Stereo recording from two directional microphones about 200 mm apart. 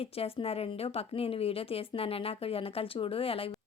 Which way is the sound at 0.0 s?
30° left (ahead or behind).